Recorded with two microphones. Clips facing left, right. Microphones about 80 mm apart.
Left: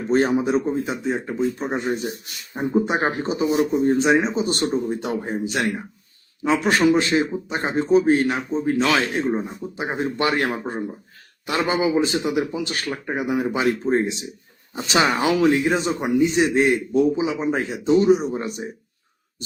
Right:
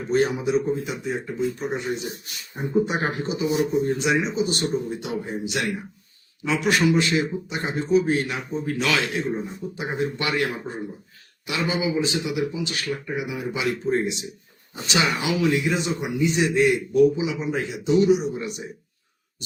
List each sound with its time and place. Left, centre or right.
0.1 s a man's voice: left
9.7 s a man's voice: left